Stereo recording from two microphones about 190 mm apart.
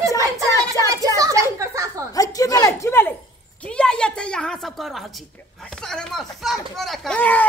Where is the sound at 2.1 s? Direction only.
20° left (ahead or behind).